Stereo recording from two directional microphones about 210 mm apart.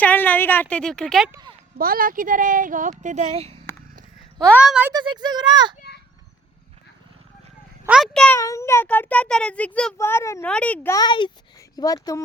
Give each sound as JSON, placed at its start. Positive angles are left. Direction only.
{"t": 0.0, "sound": "speech", "side_deg": 10}
{"t": 1.3, "sound": "speech", "side_deg": -20}
{"t": 1.8, "sound": "speech", "side_deg": -45}
{"t": 4.4, "sound": "speech", "side_deg": 5}
{"t": 4.9, "sound": "speech", "side_deg": -20}
{"t": 7.9, "sound": "speech", "side_deg": 0}
{"t": 8.4, "sound": "speech", "side_deg": 15}